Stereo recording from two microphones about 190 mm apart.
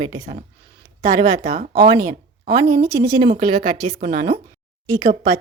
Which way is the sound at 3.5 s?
40° right (ahead or behind).